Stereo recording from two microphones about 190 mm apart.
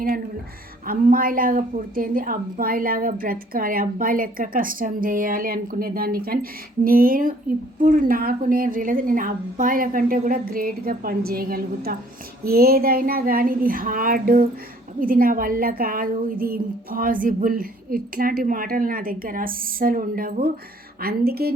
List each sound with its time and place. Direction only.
0.9 s a woman's voice: 50° right (ahead or behind)